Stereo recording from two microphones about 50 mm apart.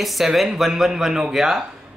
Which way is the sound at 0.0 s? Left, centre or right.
Centre.